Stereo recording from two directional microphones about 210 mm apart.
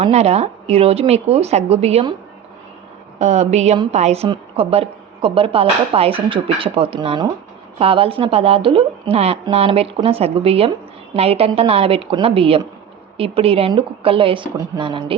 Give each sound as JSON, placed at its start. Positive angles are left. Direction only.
{"t": 0.0, "sound": "a woman's voice", "side_deg": -30}
{"t": 3.2, "sound": "a woman's voice", "side_deg": -35}